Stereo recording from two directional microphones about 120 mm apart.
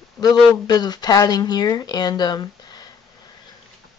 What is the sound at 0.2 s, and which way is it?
Speech, 35° left (ahead or behind).